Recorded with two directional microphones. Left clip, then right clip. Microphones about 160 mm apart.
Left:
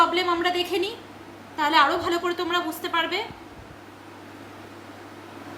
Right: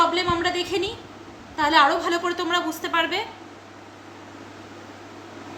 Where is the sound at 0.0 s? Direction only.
5° right (ahead or behind).